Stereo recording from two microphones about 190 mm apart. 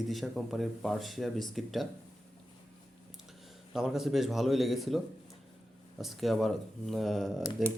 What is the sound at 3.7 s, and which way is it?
Speech, centre (ahead or behind).